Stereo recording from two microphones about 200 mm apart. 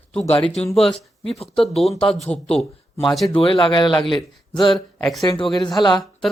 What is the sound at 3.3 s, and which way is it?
Speech, 25° left (ahead or behind).